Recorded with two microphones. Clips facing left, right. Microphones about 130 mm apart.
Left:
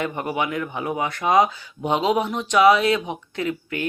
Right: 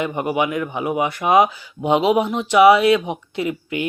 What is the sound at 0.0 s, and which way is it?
Speech, 15° right (ahead or behind).